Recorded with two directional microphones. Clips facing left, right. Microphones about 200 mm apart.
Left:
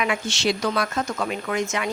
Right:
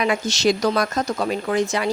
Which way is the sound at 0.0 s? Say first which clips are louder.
Right 4 dB; 40° right (ahead or behind).